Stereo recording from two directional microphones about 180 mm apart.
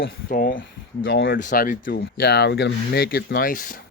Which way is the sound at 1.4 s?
50° left (ahead or behind).